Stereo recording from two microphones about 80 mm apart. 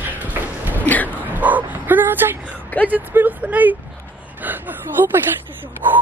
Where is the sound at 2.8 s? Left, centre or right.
Right.